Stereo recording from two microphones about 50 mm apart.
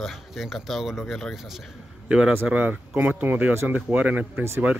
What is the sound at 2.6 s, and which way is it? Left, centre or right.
Speech, right.